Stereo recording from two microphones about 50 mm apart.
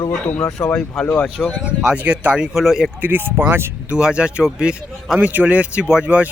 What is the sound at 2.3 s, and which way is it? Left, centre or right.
Speech, centre.